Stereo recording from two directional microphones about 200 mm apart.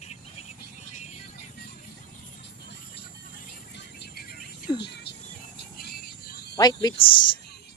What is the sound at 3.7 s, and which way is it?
Music, 55° left (ahead or behind).